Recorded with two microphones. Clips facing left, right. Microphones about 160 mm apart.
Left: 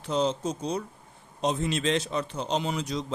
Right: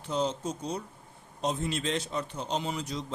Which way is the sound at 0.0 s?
90° left.